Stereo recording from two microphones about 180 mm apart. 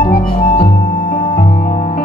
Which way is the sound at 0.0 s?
55° left (ahead or behind).